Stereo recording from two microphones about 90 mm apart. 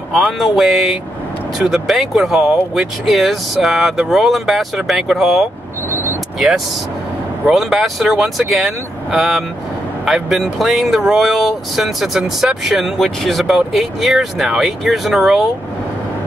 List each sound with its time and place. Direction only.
0.4 s speech: centre (ahead or behind)
5.9 s vehicle: 25° right (ahead or behind)
7.4 s speech: 5° right (ahead or behind)